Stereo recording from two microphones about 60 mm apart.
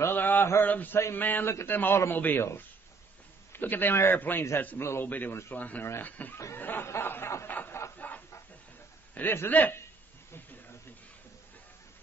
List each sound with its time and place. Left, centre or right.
0.1 s mantra: left
0.6 s a man's voice: left
3.5 s a man's voice: left
6.5 s snicker: left
6.9 s a sound: left
8.0 s chicken: left
9.1 s a man's voice: left